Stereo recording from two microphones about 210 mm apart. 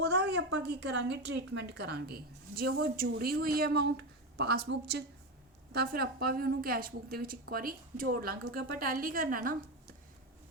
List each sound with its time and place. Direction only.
0.0 s a woman's voice: 55° right (ahead or behind)